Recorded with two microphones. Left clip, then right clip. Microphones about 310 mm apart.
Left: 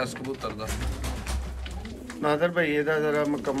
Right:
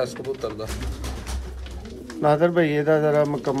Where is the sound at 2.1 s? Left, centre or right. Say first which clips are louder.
Right 5 dB; right.